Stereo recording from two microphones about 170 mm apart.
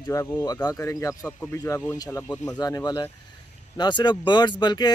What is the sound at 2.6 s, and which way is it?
Speech, 20° left (ahead or behind).